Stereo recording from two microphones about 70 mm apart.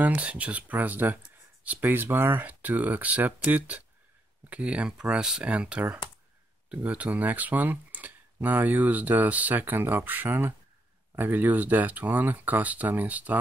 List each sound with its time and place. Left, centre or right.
0.0 s speech: centre